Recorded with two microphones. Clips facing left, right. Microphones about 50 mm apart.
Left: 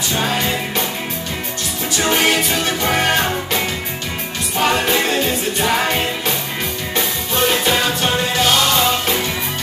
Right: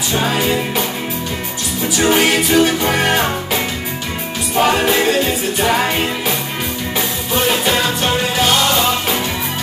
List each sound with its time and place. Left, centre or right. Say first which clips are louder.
0.2 s music: right 3 dB; centre
2.0 s music: right 2 dB; centre
4.6 s music: right 3 dB; centre